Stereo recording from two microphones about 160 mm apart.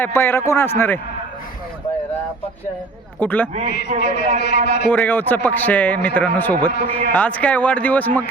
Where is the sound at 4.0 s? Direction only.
90° left.